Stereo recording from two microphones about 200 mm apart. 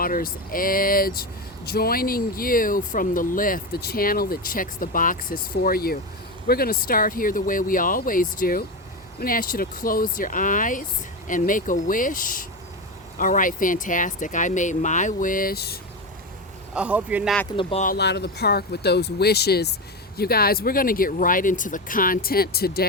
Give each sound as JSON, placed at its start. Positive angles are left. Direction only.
{"t": 0.0, "sound": "speech", "side_deg": 45}
{"t": 16.7, "sound": "a man's voice", "side_deg": -5}
{"t": 17.6, "sound": "speech", "side_deg": 30}
{"t": 17.8, "sound": "speech", "side_deg": 55}